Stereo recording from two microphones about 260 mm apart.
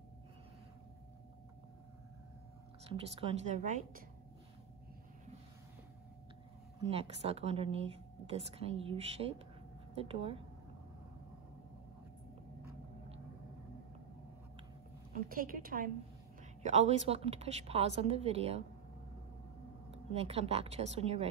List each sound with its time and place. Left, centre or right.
2.9 s a woman's voice: right
6.9 s a woman's voice: right
9.9 s a woman's voice: right
15.2 s a woman's voice: right
19.9 s a woman's voice: right